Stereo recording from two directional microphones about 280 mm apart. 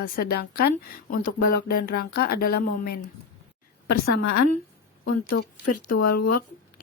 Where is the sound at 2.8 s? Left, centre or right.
Left.